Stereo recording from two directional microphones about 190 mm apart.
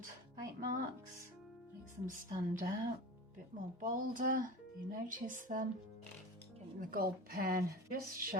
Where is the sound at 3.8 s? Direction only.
45° right (ahead or behind).